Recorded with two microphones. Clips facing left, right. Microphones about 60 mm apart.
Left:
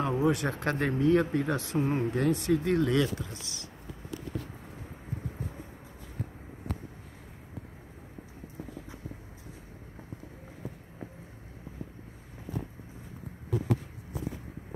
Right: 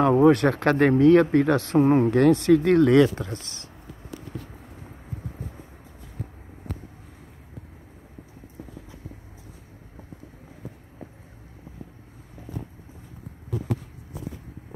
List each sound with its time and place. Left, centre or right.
0.0 s speech: right
2.0 s speech: right